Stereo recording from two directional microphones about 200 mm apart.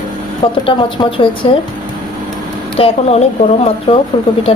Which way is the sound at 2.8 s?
30° left (ahead or behind).